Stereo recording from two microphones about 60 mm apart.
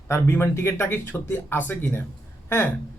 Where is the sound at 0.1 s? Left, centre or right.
Left.